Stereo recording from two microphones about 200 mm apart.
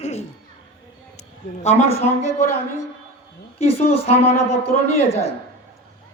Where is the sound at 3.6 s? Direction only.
30° left (ahead or behind).